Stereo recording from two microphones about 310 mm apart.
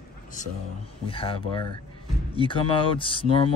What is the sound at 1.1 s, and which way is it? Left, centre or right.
Speech, centre.